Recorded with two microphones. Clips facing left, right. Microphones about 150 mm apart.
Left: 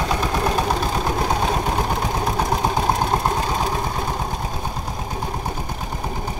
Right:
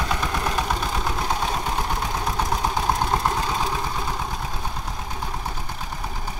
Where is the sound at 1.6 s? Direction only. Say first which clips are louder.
Left 4 dB; 40° left (ahead or behind).